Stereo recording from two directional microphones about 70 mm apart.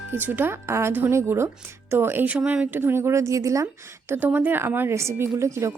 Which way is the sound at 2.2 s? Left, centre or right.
Right.